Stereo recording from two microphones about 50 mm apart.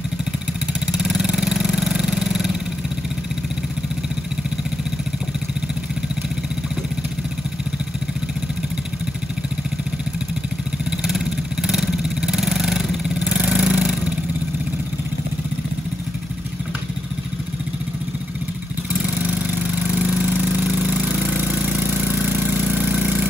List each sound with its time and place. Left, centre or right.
0.9 s vehicle: centre
10.9 s vehicle: centre
13.2 s vehicle: right
13.7 s vehicle: centre